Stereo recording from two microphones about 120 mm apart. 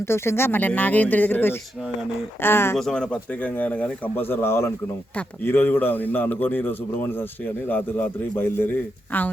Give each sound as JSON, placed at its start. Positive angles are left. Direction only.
{"t": 0.0, "sound": "a man's voice", "side_deg": 20}
{"t": 2.7, "sound": "a man's voice", "side_deg": 5}